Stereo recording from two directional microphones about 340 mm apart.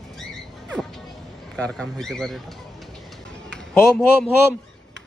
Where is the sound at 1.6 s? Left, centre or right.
Centre.